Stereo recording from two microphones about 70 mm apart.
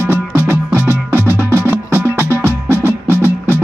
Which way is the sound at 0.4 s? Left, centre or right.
Right.